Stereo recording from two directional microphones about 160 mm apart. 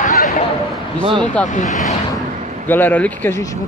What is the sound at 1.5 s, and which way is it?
Speech, 50° left (ahead or behind).